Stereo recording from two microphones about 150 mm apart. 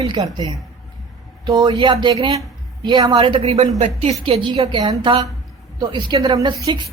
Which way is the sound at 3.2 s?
40° right (ahead or behind).